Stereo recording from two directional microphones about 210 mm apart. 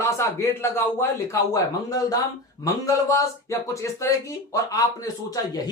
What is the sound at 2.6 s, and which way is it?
A man's voice, 15° left (ahead or behind).